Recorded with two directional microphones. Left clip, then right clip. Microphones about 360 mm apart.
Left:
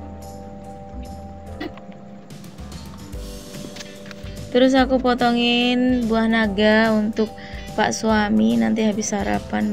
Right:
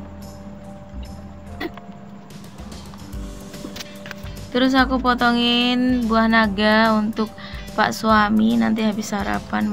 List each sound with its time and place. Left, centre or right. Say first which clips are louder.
4.5 s speech: left 2 dB; centre